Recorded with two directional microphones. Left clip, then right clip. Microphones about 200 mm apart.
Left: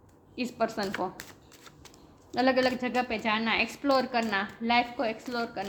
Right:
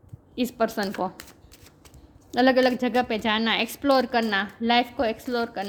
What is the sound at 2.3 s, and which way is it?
A woman's voice, 55° right (ahead or behind).